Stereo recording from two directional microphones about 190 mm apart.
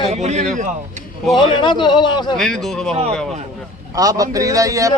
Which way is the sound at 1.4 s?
25° left (ahead or behind).